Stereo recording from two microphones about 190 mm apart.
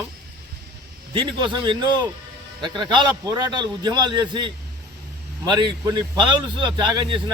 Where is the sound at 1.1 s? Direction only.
25° right (ahead or behind).